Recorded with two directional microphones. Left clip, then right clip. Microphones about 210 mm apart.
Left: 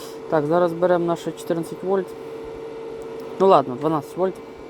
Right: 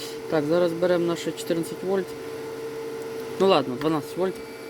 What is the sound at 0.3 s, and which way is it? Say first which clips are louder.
Speech: left 3 dB; centre (ahead or behind).